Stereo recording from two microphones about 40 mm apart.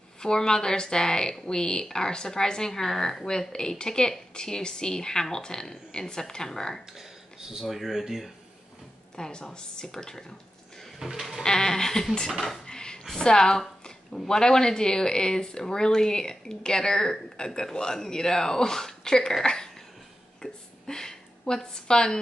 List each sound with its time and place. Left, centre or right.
0.2 s a woman's voice: centre
6.9 s a sound: centre
7.6 s speech: centre
9.1 s speech: centre
11.0 s sheep: centre
11.4 s a woman's voice: centre
12.6 s a sound: centre
13.2 s a woman's voice: centre
20.4 s a sound: centre
20.8 s a woman's voice: centre